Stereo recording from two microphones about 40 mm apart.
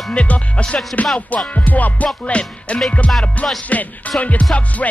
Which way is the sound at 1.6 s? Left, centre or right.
Left.